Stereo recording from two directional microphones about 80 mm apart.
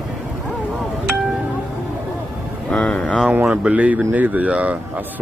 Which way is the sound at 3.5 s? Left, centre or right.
Centre.